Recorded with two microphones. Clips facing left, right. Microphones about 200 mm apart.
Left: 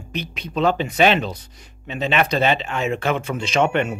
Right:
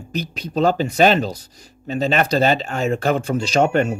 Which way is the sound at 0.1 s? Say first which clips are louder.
Right 3 dB; 40° right (ahead or behind).